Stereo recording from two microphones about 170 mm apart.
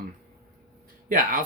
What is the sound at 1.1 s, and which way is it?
Speech, 55° right (ahead or behind).